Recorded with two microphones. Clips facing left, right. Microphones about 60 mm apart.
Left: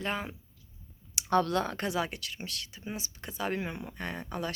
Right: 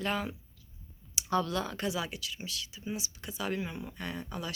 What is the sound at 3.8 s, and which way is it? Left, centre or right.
Speech, left.